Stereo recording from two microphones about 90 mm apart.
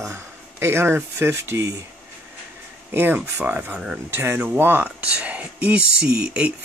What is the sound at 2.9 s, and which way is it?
Speech, 20° right (ahead or behind).